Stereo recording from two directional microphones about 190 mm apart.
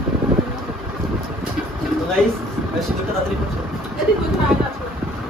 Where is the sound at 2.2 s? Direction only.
5° left (ahead or behind).